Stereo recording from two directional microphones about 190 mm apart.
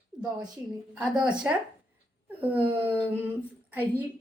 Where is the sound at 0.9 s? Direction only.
5° right (ahead or behind).